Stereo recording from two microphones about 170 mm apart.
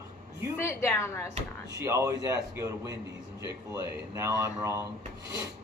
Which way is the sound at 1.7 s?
15° right (ahead or behind).